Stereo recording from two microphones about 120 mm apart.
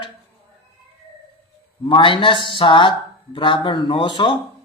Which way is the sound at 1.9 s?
45° left (ahead or behind).